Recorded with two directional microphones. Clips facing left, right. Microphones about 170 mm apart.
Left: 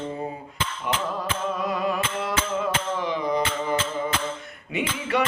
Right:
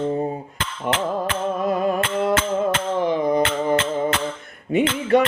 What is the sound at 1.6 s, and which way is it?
Music, 50° right (ahead or behind).